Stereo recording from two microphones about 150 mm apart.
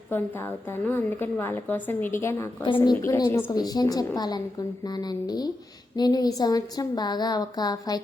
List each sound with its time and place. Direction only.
0.9 s a woman's voice: 15° left (ahead or behind)
2.6 s a woman's voice: 35° left (ahead or behind)
3.0 s a woman's voice: 20° left (ahead or behind)